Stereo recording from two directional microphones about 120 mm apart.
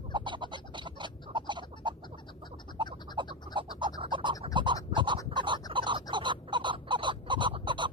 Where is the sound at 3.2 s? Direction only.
40° right (ahead or behind).